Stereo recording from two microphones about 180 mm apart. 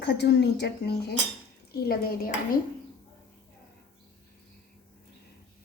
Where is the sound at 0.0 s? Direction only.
70° left (ahead or behind).